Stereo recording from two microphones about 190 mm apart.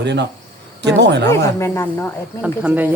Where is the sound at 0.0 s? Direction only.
65° right (ahead or behind).